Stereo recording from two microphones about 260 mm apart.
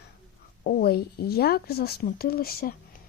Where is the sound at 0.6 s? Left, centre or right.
Left.